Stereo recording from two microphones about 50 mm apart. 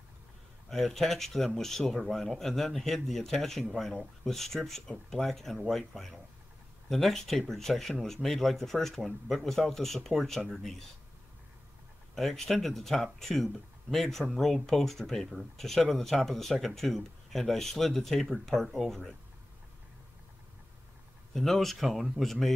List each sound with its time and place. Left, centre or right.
0.7 s speech: centre
12.2 s speech: centre
21.3 s speech: centre